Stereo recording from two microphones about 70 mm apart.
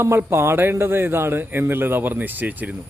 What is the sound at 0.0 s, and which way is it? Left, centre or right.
A man's voice, right.